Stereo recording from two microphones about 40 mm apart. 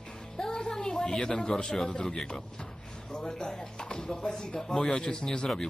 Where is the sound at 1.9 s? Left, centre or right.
Centre.